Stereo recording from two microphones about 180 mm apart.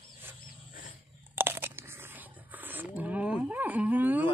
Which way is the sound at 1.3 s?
10° right (ahead or behind).